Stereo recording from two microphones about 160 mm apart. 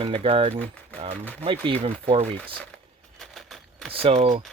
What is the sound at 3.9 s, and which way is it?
Speech, 40° right (ahead or behind).